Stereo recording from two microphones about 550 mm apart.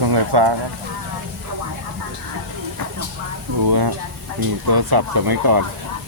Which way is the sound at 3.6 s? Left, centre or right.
Right.